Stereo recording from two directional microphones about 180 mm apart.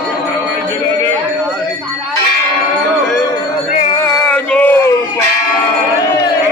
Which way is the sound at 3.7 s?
35° left (ahead or behind).